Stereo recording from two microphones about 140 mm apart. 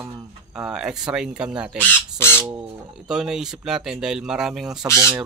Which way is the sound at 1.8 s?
15° left (ahead or behind).